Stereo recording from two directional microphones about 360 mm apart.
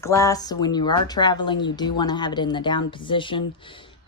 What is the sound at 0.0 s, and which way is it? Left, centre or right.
A woman's voice, centre.